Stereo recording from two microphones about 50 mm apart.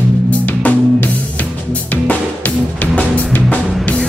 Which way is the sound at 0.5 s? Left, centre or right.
Left.